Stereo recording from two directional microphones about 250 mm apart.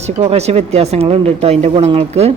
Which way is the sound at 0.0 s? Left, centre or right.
Right.